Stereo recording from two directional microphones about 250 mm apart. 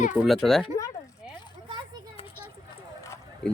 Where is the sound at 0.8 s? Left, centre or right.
Centre.